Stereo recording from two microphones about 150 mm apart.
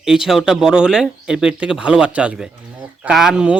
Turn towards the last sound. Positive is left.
turn(degrees=-5)  # may be behind; listen again after turning